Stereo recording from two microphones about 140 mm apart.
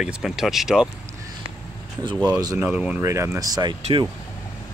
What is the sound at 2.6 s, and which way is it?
Speech, 5° right (ahead or behind).